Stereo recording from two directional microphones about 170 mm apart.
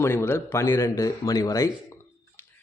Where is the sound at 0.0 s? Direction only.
15° left (ahead or behind).